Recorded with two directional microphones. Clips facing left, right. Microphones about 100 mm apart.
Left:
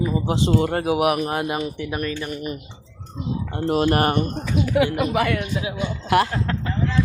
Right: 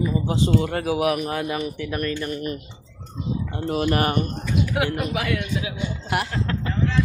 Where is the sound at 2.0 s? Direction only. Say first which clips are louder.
Right 3 dB; 5° left (ahead or behind).